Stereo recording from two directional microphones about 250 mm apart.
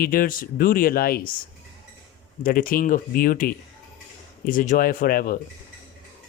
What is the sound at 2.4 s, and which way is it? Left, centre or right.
Speech, left.